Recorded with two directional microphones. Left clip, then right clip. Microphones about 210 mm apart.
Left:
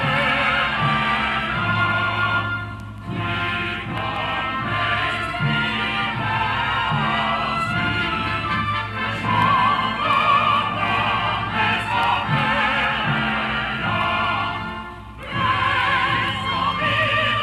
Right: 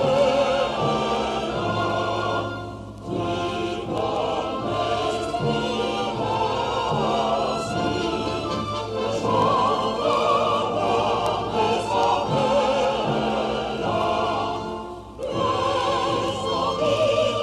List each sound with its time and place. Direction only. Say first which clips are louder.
0.0 s music: even; 20° left (ahead or behind)
7.0 s music: left 1 dB; 20° left (ahead or behind)
9.3 s music: left 3 dB; 25° left (ahead or behind)
15.4 s music: left 3 dB; 20° left (ahead or behind)
17.0 s music: even; 5° right (ahead or behind)